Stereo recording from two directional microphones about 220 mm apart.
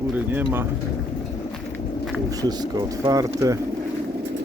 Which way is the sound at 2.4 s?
15° right (ahead or behind).